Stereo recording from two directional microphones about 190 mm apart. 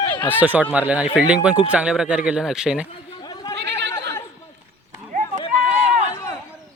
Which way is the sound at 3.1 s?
20° left (ahead or behind).